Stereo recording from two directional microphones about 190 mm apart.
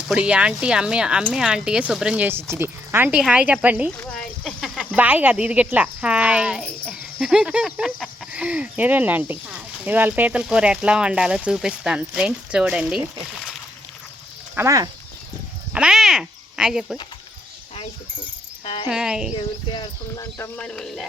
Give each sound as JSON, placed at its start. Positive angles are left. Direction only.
{"t": 0.1, "sound": "speech", "side_deg": -5}
{"t": 3.9, "sound": "speech", "side_deg": 5}
{"t": 14.5, "sound": "speech", "side_deg": -15}
{"t": 15.7, "sound": "speech", "side_deg": -5}
{"t": 18.6, "sound": "cricket", "side_deg": 30}
{"t": 18.9, "sound": "speech", "side_deg": -5}
{"t": 19.3, "sound": "speech", "side_deg": 25}
{"t": 20.6, "sound": "speech", "side_deg": 5}